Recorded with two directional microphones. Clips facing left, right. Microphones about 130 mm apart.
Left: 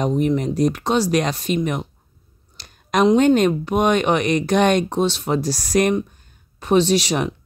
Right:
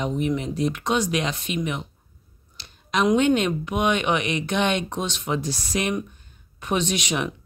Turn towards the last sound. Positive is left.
turn(degrees=35)  # may be behind; listen again after turning